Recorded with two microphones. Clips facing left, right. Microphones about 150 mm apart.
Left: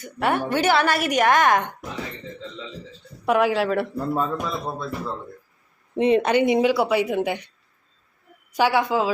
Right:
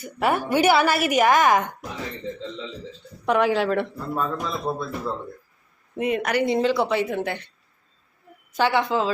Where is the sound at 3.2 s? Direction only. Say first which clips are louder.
Left 1 dB; 5° left (ahead or behind).